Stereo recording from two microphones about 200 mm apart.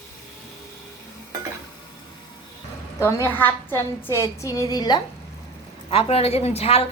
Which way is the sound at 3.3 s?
10° left (ahead or behind).